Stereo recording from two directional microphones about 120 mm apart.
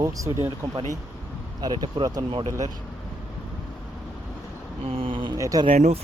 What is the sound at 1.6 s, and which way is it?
Speech, 35° right (ahead or behind).